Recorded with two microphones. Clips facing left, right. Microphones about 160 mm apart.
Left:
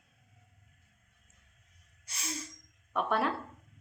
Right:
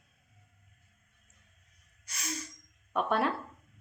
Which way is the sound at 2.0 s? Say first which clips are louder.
Right 1 dB; 30° left (ahead or behind).